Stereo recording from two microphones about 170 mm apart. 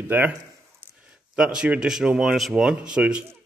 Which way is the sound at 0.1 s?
10° right (ahead or behind).